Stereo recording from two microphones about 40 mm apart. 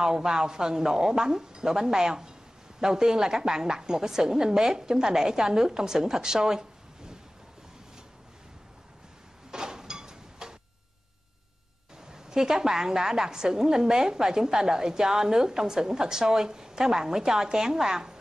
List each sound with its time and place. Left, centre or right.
0.0 s a woman's voice: centre
9.5 s a sound: centre
12.1 s a woman's voice: centre